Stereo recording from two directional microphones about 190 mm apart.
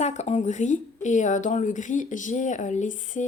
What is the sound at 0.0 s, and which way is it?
A woman's voice, 35° left (ahead or behind).